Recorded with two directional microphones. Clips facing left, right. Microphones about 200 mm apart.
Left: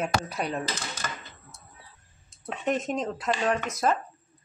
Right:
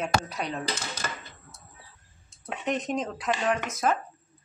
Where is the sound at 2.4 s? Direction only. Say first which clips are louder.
Left 2 dB; centre (ahead or behind).